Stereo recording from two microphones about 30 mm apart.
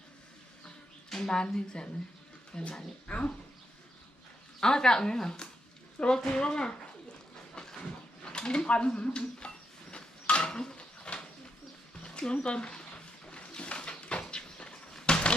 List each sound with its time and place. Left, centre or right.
1.3 s speech: left
3.1 s speech: left
4.6 s speech: left
7.5 s train: left
7.8 s a sound: left
10.8 s a sound: left
14.0 s cupboard open or close: left